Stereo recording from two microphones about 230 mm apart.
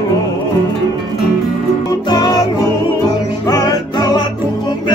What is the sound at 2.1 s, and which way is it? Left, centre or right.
Music, centre.